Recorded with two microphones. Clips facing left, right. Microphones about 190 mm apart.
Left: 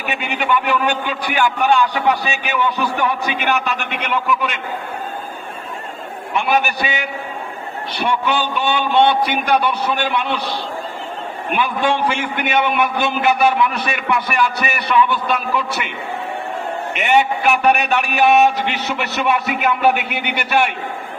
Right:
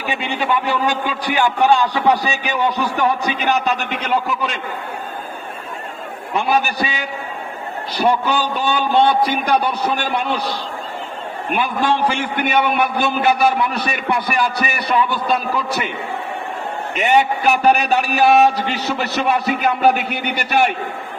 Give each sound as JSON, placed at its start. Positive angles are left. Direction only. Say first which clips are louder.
{"t": 0.1, "sound": "a man's voice", "louder": "even", "side_deg": -35}
{"t": 6.3, "sound": "a man's voice", "louder": "even", "side_deg": -35}
{"t": 11.5, "sound": "a man's voice", "louder": "even", "side_deg": -40}
{"t": 17.0, "sound": "a man's voice", "louder": "right 1 dB", "side_deg": -35}